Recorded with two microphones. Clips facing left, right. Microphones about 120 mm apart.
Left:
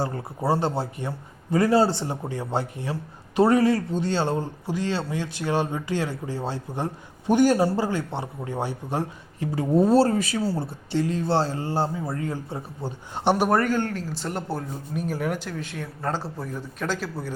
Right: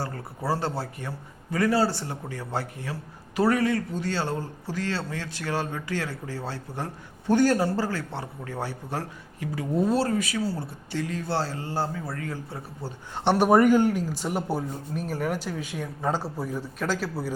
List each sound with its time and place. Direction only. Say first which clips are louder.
0.0 s a man's voice: left 5 dB; 20° left (ahead or behind)
13.2 s speech: even; centre (ahead or behind)
13.5 s speech: right 4 dB; 15° right (ahead or behind)
14.7 s speech: left 2 dB; centre (ahead or behind)